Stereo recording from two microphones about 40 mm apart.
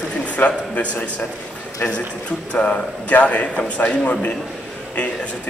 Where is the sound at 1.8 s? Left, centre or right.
Left.